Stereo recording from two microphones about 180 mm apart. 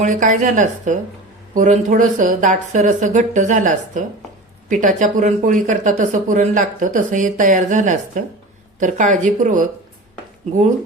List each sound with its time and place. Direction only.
0.0 s speech: 45° right (ahead or behind)